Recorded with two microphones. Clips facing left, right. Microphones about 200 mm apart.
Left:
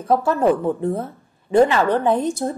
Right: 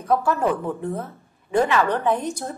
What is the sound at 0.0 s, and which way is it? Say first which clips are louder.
Speech: left 4 dB; 25° left (ahead or behind).